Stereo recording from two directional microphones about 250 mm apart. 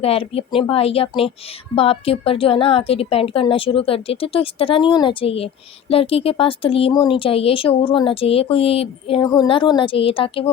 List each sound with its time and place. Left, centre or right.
0.0 s speech: left